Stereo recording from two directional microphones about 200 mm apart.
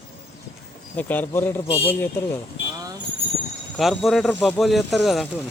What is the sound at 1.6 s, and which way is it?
Speech, 30° left (ahead or behind).